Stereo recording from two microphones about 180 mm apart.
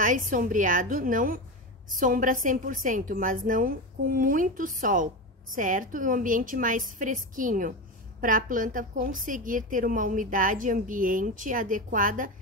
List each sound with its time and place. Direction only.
0.0 s a woman's voice: 50° right (ahead or behind)